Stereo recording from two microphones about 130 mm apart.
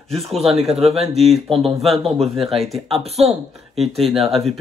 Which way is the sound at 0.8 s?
55° right (ahead or behind).